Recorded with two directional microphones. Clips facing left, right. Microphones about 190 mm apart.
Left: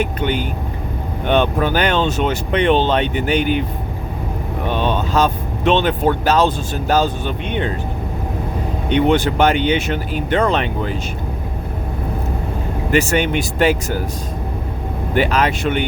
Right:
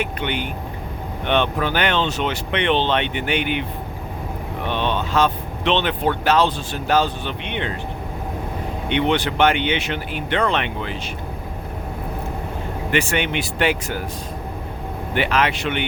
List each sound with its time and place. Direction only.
0.0 s speech: 40° left (ahead or behind)
4.7 s speech: 40° left (ahead or behind)
8.9 s speech: 45° left (ahead or behind)
12.9 s speech: 40° left (ahead or behind)
15.1 s speech: 40° left (ahead or behind)